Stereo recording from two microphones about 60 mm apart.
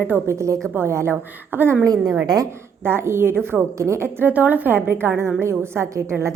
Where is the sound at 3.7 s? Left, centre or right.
Right.